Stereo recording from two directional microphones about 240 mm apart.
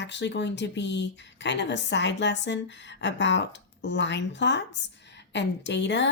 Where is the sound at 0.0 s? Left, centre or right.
Left.